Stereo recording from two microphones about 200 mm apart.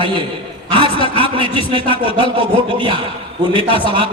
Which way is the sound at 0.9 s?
25° left (ahead or behind).